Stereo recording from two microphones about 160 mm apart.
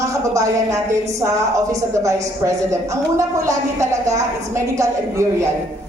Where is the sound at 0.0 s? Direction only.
20° right (ahead or behind).